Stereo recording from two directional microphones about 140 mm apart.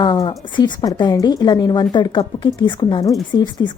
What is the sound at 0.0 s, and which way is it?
A woman's voice, 30° left (ahead or behind).